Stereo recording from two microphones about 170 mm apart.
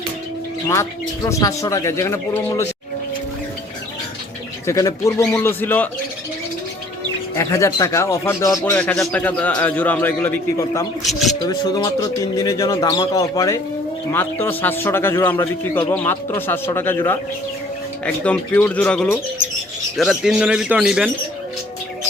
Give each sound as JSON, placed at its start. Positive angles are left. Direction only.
{"t": 0.7, "sound": "a man's voice", "side_deg": 15}
{"t": 4.6, "sound": "a man's voice", "side_deg": 15}
{"t": 7.3, "sound": "a man's voice", "side_deg": 15}
{"t": 8.7, "sound": "a man's voice", "side_deg": 5}
{"t": 11.0, "sound": "speech", "side_deg": 0}
{"t": 11.4, "sound": "a man's voice", "side_deg": 20}
{"t": 18.0, "sound": "a man's voice", "side_deg": 5}
{"t": 20.0, "sound": "speech", "side_deg": 0}